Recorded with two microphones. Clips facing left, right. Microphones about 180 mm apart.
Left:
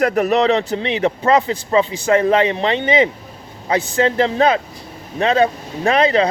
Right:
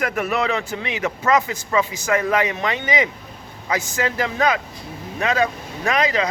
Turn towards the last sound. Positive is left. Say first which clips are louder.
# left 6 dB
turn(degrees=30)  # may be behind; listen again after turning